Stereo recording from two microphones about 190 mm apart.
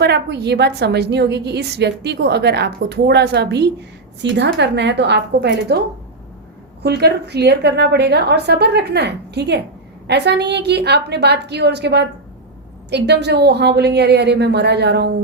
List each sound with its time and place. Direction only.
0.0 s a woman's voice: 60° right (ahead or behind)
6.8 s a woman's voice: 60° right (ahead or behind)